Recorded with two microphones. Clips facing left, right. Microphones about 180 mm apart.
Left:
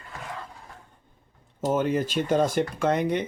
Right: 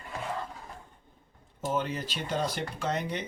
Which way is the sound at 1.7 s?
50° left (ahead or behind).